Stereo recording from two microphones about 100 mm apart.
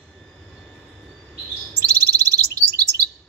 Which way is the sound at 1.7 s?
35° right (ahead or behind).